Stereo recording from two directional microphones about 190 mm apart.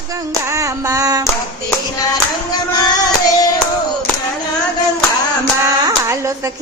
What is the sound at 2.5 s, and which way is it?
Music, 20° left (ahead or behind).